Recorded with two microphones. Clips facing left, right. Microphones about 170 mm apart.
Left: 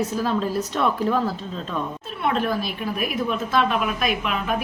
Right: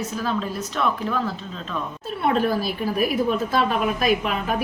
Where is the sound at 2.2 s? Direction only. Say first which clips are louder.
Right 2 dB; 35° right (ahead or behind).